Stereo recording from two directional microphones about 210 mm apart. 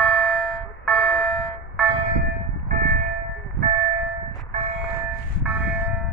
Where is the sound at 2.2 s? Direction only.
45° right (ahead or behind).